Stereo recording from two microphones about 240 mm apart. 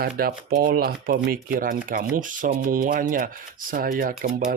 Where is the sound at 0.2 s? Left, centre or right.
Right.